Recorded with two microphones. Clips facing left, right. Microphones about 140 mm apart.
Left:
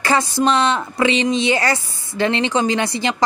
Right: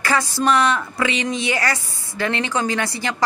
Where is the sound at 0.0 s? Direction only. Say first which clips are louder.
Left 3 dB; 25° left (ahead or behind).